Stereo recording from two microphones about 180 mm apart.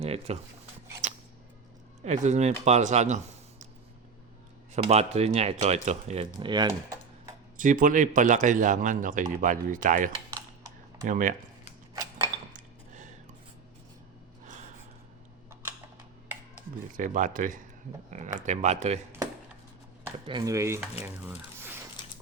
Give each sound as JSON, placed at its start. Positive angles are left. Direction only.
{"t": 0.0, "sound": "a sound", "side_deg": -35}
{"t": 1.0, "sound": "music", "side_deg": -40}
{"t": 2.0, "sound": "speech", "side_deg": -40}
{"t": 4.7, "sound": "speech", "side_deg": -35}
{"t": 7.6, "sound": "a man's voice", "side_deg": -45}
{"t": 12.5, "sound": "dishes", "side_deg": -45}
{"t": 14.4, "sound": "gasp", "side_deg": -45}
{"t": 16.9, "sound": "a man's voice", "side_deg": -45}
{"t": 20.2, "sound": "speech", "side_deg": -20}